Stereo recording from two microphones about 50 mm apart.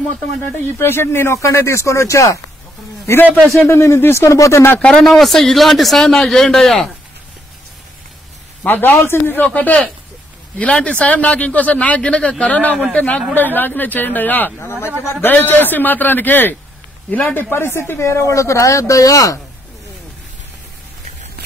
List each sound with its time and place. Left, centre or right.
0.6 s speech: left
3.1 s speech: left
4.1 s speech: left
4.7 s speech: left
5.0 s speech: centre
8.6 s speech: left
8.9 s speech: left
9.4 s a man's voice: left
13.3 s a man's voice: left
14.6 s a man's voice: left
17.9 s speech: left